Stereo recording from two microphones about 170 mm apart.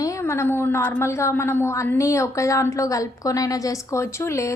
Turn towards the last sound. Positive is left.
turn(degrees=15)  # may be behind; listen again after turning